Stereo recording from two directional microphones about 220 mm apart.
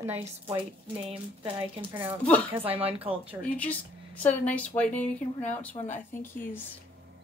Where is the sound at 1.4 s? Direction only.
25° right (ahead or behind).